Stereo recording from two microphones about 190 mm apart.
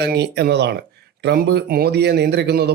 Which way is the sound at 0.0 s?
60° right (ahead or behind).